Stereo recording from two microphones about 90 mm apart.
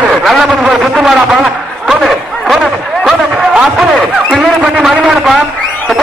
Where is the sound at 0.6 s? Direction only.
15° right (ahead or behind).